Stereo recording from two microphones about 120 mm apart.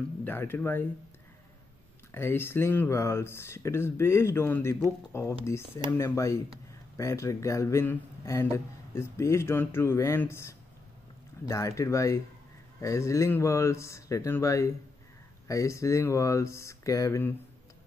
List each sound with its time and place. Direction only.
0.2 s speech: 15° left (ahead or behind)
2.1 s speech: 20° left (ahead or behind)